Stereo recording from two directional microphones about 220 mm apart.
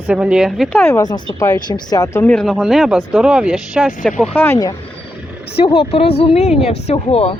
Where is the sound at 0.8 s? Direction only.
15° left (ahead or behind).